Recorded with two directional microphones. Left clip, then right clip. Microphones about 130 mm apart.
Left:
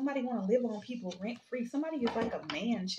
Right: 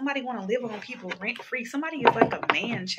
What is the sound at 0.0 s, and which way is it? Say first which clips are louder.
Speech: right 5 dB; 20° left (ahead or behind).